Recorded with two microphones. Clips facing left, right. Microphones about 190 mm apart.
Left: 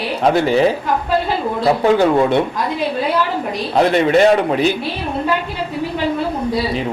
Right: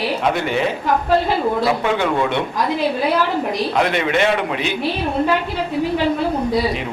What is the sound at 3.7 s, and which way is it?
A man's voice, 35° left (ahead or behind).